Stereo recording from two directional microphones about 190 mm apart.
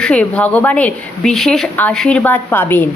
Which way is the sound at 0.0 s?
5° left (ahead or behind).